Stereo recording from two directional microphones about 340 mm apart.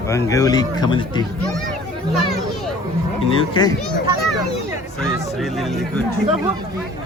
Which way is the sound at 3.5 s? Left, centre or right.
Centre.